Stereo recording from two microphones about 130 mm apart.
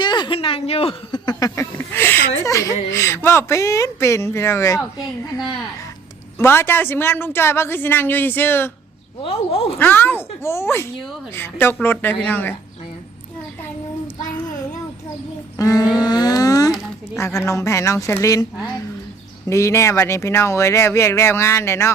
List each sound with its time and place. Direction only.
0.0 s a sound: 35° left (ahead or behind)
1.2 s speech: 30° left (ahead or behind)
6.4 s speech: 20° left (ahead or behind)
9.2 s speech: 50° left (ahead or behind)
9.7 s speech: 15° left (ahead or behind)
15.5 s a sound: 25° left (ahead or behind)
17.2 s speech: 20° left (ahead or behind)